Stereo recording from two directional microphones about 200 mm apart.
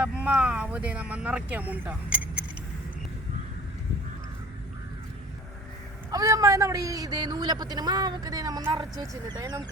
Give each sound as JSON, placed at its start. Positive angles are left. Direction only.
{"t": 0.2, "sound": "speech", "side_deg": -5}
{"t": 6.1, "sound": "a man's voice", "side_deg": -15}